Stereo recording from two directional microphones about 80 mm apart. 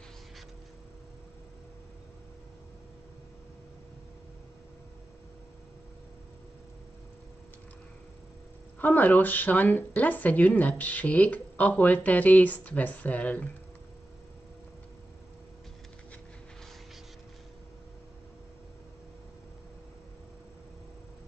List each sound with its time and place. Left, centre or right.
8.7 s speech: left